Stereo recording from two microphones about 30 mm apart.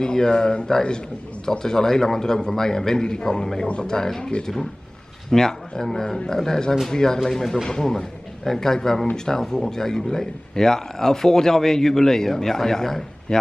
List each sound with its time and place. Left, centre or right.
0.0 s a man's voice: left
5.3 s a man's voice: centre